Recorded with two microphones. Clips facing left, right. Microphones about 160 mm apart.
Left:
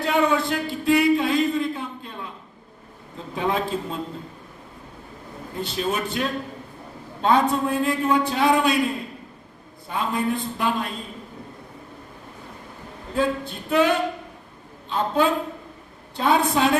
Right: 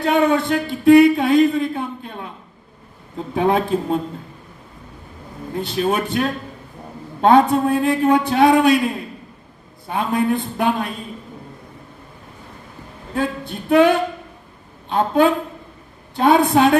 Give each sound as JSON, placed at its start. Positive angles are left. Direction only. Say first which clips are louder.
{"t": 0.0, "sound": "speech", "louder": "right 4 dB", "side_deg": -60}
{"t": 3.3, "sound": "speech", "louder": "right 7 dB", "side_deg": -55}
{"t": 5.7, "sound": "speech", "louder": "right 6 dB", "side_deg": -55}
{"t": 9.9, "sound": "speech", "louder": "right 5 dB", "side_deg": -60}
{"t": 13.1, "sound": "a man's voice", "louder": "right 1 dB", "side_deg": -60}